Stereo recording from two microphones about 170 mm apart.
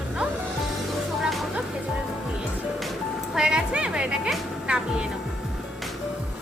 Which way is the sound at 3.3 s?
5° right (ahead or behind).